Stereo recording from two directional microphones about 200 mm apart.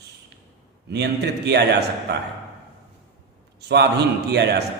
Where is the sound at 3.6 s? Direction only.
55° right (ahead or behind).